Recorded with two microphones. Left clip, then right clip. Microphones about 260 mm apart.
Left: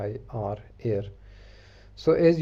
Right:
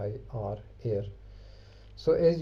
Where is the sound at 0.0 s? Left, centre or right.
Left.